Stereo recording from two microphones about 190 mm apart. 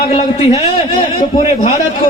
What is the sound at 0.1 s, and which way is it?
A man's voice, 35° left (ahead or behind).